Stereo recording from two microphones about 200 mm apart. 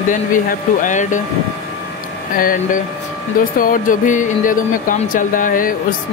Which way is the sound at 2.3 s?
45° left (ahead or behind).